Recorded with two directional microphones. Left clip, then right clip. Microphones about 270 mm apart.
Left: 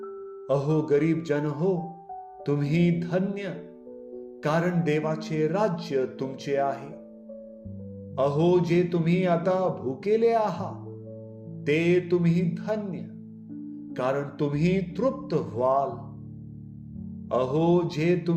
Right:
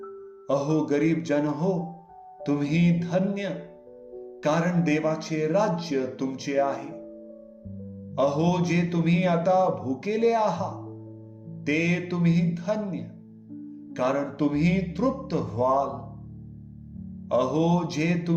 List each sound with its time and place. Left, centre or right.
0.4 s a man's voice: left
8.1 s a man's voice: left
17.2 s a man's voice: left